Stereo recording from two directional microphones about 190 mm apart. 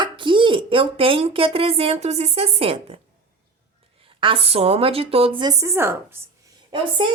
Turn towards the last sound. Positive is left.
turn(degrees=-25)  # may be behind; listen again after turning